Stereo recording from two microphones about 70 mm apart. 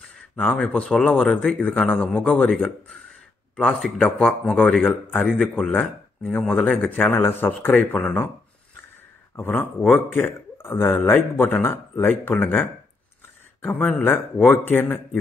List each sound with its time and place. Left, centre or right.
0.6 s a man's voice: centre
7.1 s speech: left
9.4 s speech: left